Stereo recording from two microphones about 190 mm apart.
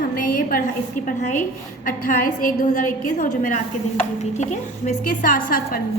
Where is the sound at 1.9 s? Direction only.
45° left (ahead or behind).